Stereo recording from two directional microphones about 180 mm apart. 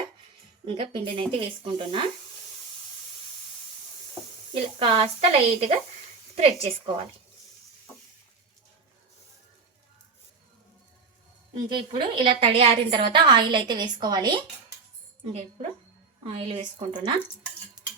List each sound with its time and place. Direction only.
0.6 s a woman's voice: 30° right (ahead or behind)
4.5 s speech: 30° right (ahead or behind)
11.7 s a woman's voice: 25° right (ahead or behind)